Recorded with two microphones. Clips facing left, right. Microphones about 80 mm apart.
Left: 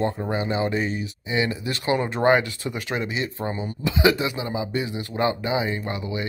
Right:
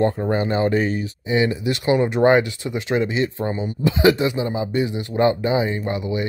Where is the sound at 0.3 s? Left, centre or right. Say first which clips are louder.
Right 5 dB; right.